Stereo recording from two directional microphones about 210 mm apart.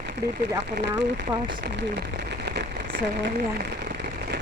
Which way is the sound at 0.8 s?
55° right (ahead or behind).